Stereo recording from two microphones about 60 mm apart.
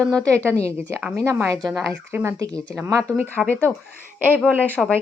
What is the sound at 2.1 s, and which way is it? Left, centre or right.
Speech, right.